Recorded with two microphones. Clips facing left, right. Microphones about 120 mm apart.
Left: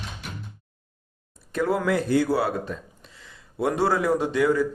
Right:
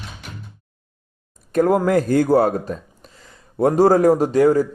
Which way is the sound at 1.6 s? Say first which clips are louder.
Right 7 dB; 45° right (ahead or behind).